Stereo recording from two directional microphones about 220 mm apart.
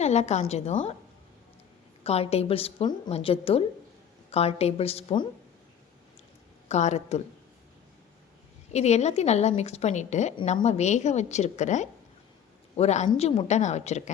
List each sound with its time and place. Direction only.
0.0 s a woman's voice: 30° left (ahead or behind)
2.0 s a woman's voice: 25° left (ahead or behind)
6.7 s a woman's voice: 30° left (ahead or behind)
8.7 s a woman's voice: 30° left (ahead or behind)